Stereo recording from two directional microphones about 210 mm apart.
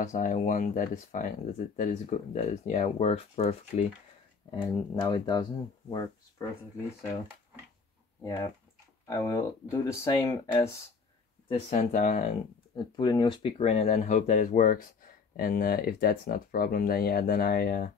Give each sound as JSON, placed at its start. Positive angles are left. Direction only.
{"t": 0.0, "sound": "speech", "side_deg": 35}
{"t": 8.2, "sound": "speech", "side_deg": 15}
{"t": 11.4, "sound": "speech", "side_deg": 30}
{"t": 12.7, "sound": "speech", "side_deg": 20}